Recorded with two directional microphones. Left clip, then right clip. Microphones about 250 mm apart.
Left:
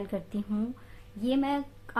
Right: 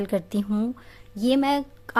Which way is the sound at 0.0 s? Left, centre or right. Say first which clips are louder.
Right 9 dB; right.